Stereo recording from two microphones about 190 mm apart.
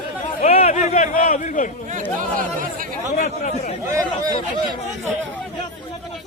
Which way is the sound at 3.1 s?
40° left (ahead or behind).